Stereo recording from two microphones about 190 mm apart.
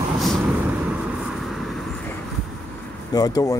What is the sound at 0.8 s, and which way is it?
Vehicle, centre (ahead or behind).